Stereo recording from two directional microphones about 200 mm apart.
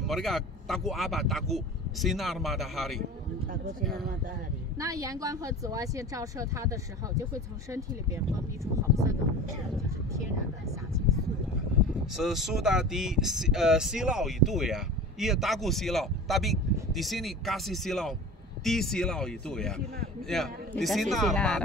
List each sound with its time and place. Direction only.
0.0 s speech: centre (ahead or behind)
4.7 s speech: 15° right (ahead or behind)
12.2 s speech: centre (ahead or behind)